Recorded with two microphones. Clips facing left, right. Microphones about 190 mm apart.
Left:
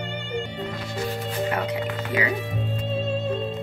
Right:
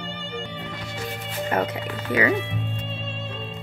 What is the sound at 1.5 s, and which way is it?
Speech, 50° right (ahead or behind).